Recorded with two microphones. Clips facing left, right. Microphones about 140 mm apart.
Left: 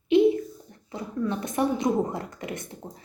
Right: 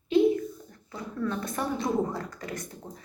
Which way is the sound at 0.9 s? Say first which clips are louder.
Left 3 dB; 20° left (ahead or behind).